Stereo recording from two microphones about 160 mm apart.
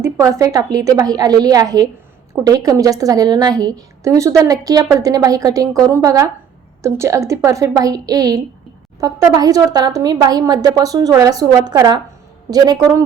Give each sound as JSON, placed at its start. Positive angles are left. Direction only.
{"t": 0.0, "sound": "a woman's voice", "side_deg": -20}